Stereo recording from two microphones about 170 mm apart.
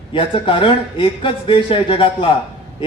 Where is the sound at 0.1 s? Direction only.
30° left (ahead or behind).